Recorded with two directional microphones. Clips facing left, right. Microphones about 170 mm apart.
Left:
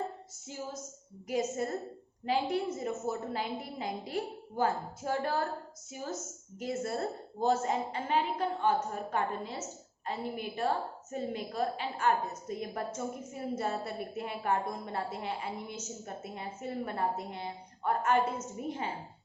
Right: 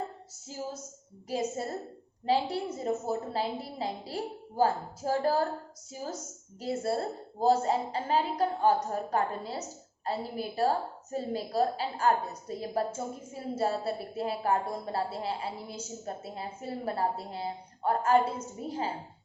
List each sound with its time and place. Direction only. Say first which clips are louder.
1.3 s a woman's voice: even; 30° right (ahead or behind)